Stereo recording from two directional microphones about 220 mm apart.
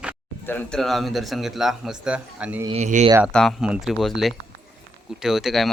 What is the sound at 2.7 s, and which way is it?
Speech, 30° right (ahead or behind).